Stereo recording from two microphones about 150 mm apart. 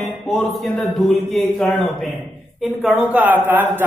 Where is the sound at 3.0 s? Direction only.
10° right (ahead or behind).